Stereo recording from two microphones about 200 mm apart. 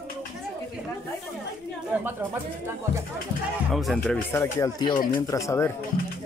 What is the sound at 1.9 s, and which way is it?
Speech, 10° right (ahead or behind).